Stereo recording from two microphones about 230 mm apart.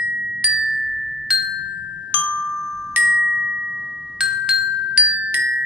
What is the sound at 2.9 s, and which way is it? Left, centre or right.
Glockenspiel, centre.